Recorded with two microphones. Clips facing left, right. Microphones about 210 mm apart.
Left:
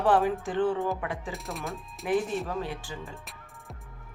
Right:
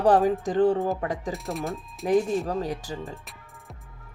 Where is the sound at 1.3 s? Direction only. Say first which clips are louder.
Right 5 dB; centre (ahead or behind).